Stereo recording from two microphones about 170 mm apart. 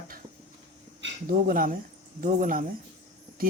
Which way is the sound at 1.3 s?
55° right (ahead or behind).